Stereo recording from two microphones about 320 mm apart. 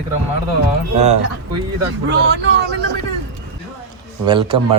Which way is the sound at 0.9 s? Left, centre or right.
Right.